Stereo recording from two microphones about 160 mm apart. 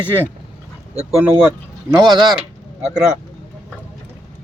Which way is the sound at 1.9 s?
25° right (ahead or behind).